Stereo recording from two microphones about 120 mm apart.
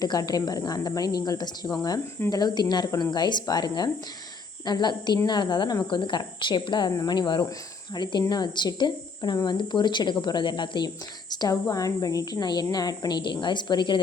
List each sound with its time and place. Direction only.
0.0 s speech: 35° left (ahead or behind)